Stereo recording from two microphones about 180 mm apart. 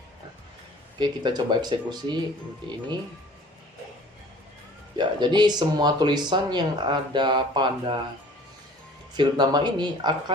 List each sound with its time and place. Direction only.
0.9 s speech: 25° right (ahead or behind)
4.9 s speech: 25° right (ahead or behind)
9.1 s speech: 25° right (ahead or behind)